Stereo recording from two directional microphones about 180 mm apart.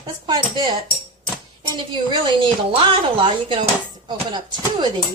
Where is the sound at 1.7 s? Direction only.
25° right (ahead or behind).